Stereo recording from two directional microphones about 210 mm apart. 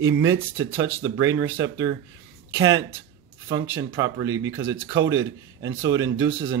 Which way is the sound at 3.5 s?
65° right (ahead or behind).